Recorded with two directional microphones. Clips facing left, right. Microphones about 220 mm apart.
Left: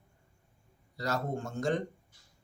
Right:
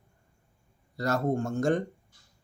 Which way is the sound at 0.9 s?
50° right (ahead or behind).